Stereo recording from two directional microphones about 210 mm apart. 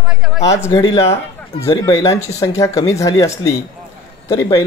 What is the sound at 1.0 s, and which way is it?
Speech, 30° left (ahead or behind).